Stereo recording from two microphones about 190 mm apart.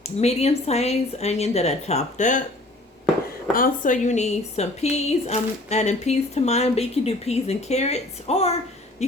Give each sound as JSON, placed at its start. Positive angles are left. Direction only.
{"t": 0.0, "sound": "a woman's voice", "side_deg": 35}
{"t": 3.5, "sound": "a woman's voice", "side_deg": 45}